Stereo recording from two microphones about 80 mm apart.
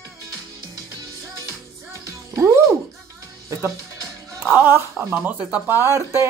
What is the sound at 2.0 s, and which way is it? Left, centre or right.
Music, right.